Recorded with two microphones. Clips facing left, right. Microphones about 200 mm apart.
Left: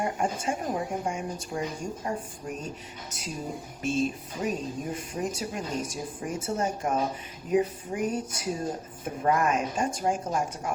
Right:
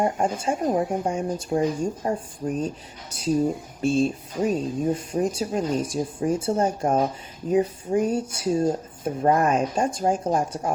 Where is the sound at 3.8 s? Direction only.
30° right (ahead or behind).